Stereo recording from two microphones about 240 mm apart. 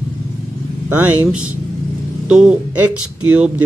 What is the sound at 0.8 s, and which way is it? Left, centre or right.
Speech, centre.